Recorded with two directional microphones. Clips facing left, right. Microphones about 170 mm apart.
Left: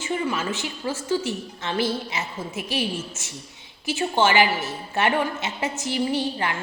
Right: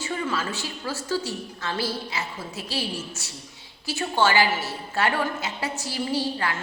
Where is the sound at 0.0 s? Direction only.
20° left (ahead or behind).